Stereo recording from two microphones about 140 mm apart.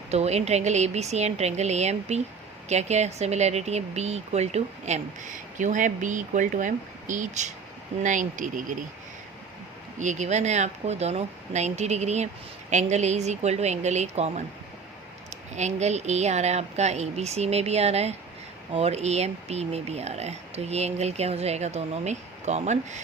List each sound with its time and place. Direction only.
0.1 s speech: 50° right (ahead or behind)
5.5 s speech: 65° right (ahead or behind)
10.0 s speech: 60° right (ahead or behind)
15.5 s speech: 55° right (ahead or behind)